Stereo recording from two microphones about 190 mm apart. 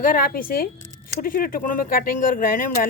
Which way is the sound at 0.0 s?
50° left (ahead or behind).